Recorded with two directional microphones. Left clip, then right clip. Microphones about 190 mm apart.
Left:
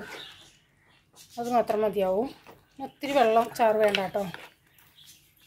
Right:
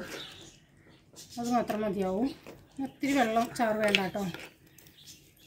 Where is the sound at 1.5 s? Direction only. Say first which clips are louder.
Left 6 dB; 50° left (ahead or behind).